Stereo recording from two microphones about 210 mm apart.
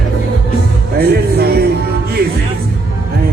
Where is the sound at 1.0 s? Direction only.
50° right (ahead or behind).